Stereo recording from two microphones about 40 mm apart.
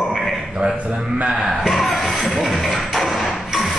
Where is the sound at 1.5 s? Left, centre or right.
Centre.